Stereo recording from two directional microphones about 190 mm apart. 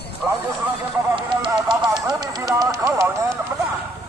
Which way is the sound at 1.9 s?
20° right (ahead or behind).